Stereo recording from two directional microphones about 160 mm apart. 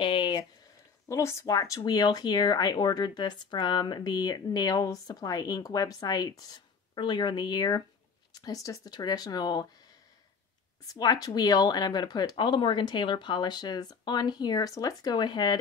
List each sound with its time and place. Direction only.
0.0 s a sound: 30° left (ahead or behind)
1.0 s speech: 20° left (ahead or behind)
10.9 s speech: 25° left (ahead or behind)